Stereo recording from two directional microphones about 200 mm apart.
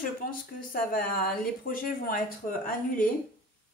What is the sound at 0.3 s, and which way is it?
Speech, 45° left (ahead or behind).